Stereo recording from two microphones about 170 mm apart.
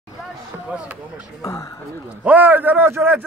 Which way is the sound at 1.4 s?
20° left (ahead or behind).